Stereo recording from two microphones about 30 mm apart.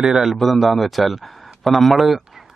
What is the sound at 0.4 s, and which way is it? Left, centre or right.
Speech, centre.